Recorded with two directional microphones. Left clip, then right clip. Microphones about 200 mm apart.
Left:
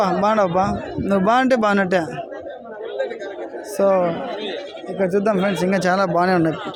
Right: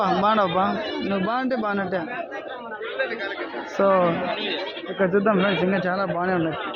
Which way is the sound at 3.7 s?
10° left (ahead or behind).